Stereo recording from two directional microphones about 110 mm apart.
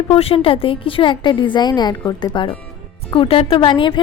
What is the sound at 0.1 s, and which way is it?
A woman's voice, 60° left (ahead or behind).